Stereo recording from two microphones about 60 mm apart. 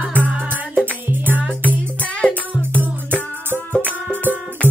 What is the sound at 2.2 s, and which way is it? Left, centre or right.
Music, centre.